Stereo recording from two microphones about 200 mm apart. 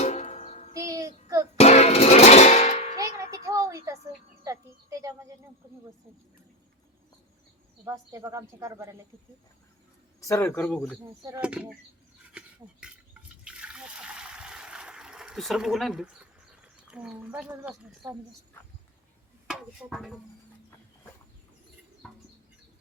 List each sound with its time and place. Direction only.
0.0 s music: 35° left (ahead or behind)
0.8 s child singing: 15° right (ahead or behind)
1.5 s music: 30° left (ahead or behind)
3.0 s a sound: 15° right (ahead or behind)
4.4 s speech: 15° right (ahead or behind)
7.9 s speech: 15° right (ahead or behind)
10.2 s speech: 15° left (ahead or behind)
11.3 s speech: 5° right (ahead or behind)
12.4 s a sound: 5° right (ahead or behind)
12.8 s water: 5° right (ahead or behind)
16.9 s a woman's voice: 5° right (ahead or behind)
19.5 s speech: centre (ahead or behind)
22.0 s bird: centre (ahead or behind)